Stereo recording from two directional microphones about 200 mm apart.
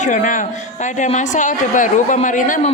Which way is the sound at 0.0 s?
40° left (ahead or behind).